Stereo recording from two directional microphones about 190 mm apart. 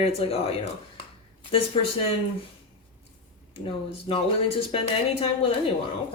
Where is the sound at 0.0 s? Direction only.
30° left (ahead or behind).